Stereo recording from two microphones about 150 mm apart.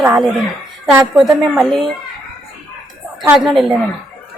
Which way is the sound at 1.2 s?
Centre (ahead or behind).